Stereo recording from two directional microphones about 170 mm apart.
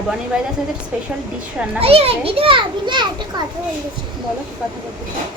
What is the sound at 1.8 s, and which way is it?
A child's voice, 35° right (ahead or behind).